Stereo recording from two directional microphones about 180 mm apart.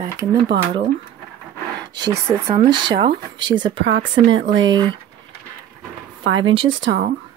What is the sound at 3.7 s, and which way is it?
Speech, 85° right.